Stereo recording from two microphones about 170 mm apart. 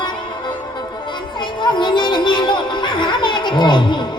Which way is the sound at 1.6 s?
25° left (ahead or behind).